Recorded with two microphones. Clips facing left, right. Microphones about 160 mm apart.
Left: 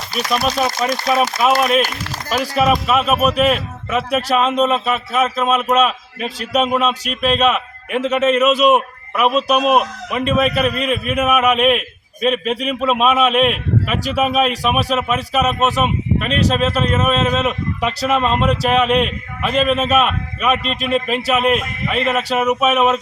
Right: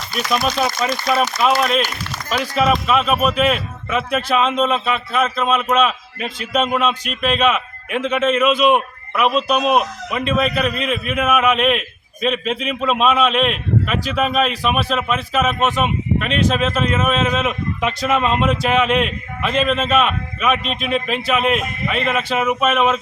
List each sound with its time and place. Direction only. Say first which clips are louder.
0.3 s speech: left 1 dB; centre (ahead or behind)
0.7 s speech: left 2 dB; 35° left (ahead or behind)
1.2 s speech: left 1 dB; 5° left (ahead or behind)
2.6 s a man's voice: left 1 dB; centre (ahead or behind)